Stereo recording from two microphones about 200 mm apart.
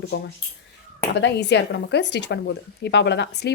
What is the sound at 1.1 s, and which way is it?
A woman's voice, 60° left (ahead or behind).